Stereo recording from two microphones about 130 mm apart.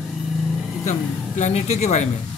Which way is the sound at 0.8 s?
65° left (ahead or behind).